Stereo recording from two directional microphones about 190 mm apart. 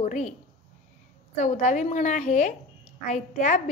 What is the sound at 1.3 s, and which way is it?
A woman's voice, 40° left (ahead or behind).